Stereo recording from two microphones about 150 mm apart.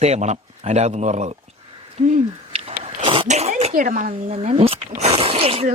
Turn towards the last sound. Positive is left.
turn(degrees=-40)  # may be behind; listen again after turning